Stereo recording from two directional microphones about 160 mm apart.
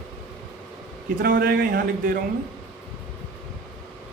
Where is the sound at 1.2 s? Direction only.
65° right (ahead or behind).